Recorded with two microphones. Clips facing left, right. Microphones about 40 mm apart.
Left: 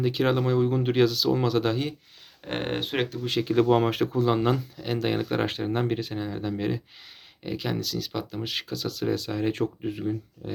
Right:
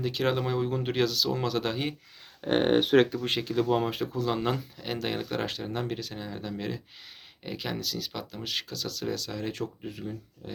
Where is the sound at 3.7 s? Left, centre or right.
Left.